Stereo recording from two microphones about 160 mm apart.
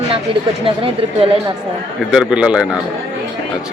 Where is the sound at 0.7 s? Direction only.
35° right (ahead or behind).